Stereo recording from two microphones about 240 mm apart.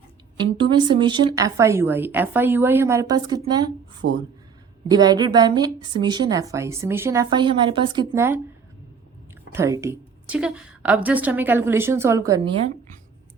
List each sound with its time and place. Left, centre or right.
0.3 s a woman's voice: centre
4.0 s speech: right
4.9 s a woman's voice: centre
9.5 s a woman's voice: centre